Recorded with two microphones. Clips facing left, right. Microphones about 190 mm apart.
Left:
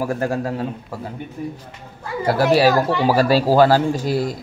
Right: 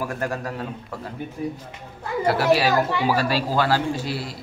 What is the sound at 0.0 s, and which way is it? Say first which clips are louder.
Speech: left 6 dB; 30° left (ahead or behind).